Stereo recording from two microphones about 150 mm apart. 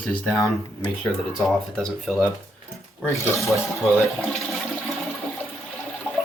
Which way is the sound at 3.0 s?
20° left (ahead or behind).